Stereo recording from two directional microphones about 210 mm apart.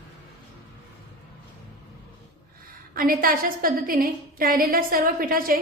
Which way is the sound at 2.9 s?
45° right (ahead or behind).